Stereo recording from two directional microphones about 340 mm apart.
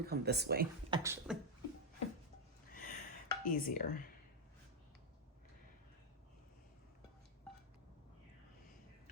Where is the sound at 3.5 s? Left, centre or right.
Left.